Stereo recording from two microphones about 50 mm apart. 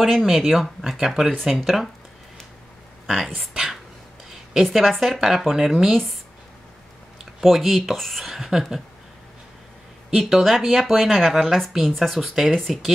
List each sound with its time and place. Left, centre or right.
0.0 s speech: centre
3.1 s speech: centre
4.6 s speech: centre
7.4 s speech: centre
10.1 s speech: centre